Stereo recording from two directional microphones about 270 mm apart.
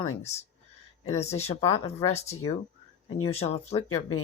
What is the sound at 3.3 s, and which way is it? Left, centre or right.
Speech, left.